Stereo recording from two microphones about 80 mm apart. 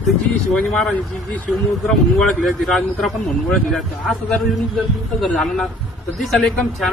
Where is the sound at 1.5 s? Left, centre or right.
Centre.